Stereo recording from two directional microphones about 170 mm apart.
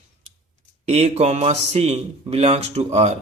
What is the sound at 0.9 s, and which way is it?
A man's voice, 40° right (ahead or behind).